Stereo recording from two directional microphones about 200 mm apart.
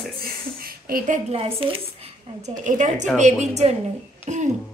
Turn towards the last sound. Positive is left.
turn(degrees=-35)  # may be behind; listen again after turning